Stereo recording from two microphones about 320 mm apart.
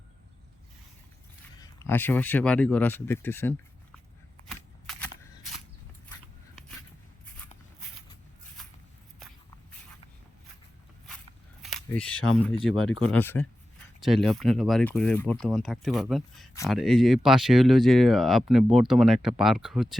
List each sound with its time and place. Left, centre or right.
1.8 s speech: centre
4.4 s a sound: centre
11.6 s camera: centre
12.6 s speech: left
13.0 s speech: centre